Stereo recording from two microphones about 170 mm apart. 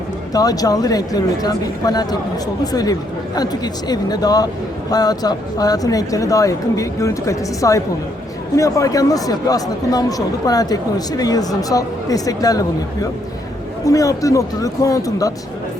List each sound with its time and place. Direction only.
0.3 s speech: 20° left (ahead or behind)